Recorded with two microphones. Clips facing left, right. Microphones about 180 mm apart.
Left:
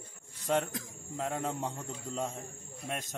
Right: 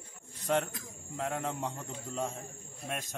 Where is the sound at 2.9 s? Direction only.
15° left (ahead or behind).